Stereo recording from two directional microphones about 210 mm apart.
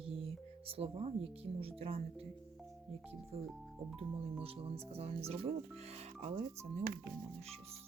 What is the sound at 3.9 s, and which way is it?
Speech, 25° right (ahead or behind).